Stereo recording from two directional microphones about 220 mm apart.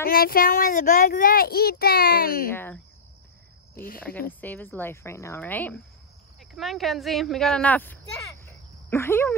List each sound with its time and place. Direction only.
0.0 s a child's voice: 40° left (ahead or behind)
2.5 s a woman's voice: 10° left (ahead or behind)
3.7 s speech: 40° left (ahead or behind)
4.0 s a woman's voice: 5° left (ahead or behind)